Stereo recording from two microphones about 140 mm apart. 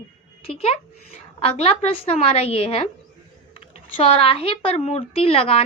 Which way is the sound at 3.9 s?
40° left (ahead or behind).